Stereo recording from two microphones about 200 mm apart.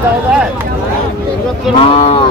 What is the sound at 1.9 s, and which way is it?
Speech, 25° left (ahead or behind).